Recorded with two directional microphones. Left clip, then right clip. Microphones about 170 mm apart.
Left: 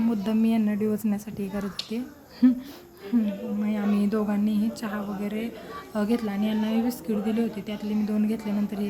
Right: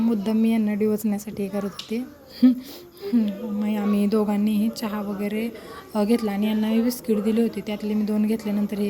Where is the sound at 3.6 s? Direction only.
10° right (ahead or behind).